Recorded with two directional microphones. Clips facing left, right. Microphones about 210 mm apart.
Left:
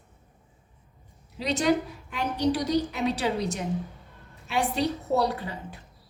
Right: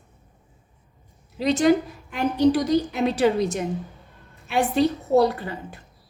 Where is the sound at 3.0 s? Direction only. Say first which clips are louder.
Right 6 dB; 50° right (ahead or behind).